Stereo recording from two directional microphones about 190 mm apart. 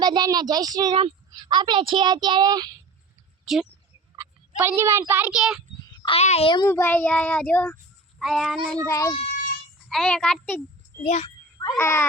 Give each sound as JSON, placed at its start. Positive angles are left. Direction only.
{"t": 0.0, "sound": "a woman's voice", "side_deg": -20}
{"t": 3.4, "sound": "speech", "side_deg": 0}
{"t": 4.2, "sound": "a child's voice", "side_deg": -15}
{"t": 5.8, "sound": "a sound", "side_deg": 20}
{"t": 6.1, "sound": "a child's voice", "side_deg": 35}
{"t": 6.7, "sound": "a child's voice", "side_deg": 10}
{"t": 8.9, "sound": "a child's voice", "side_deg": 15}
{"t": 9.2, "sound": "a sound", "side_deg": 45}
{"t": 9.9, "sound": "a child's voice", "side_deg": 0}
{"t": 11.0, "sound": "a child's voice", "side_deg": 35}
{"t": 11.8, "sound": "a child's voice", "side_deg": 15}